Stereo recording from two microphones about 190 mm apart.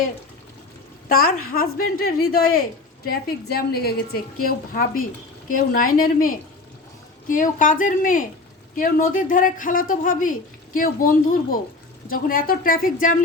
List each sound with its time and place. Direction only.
1.0 s a woman's voice: 50° left (ahead or behind)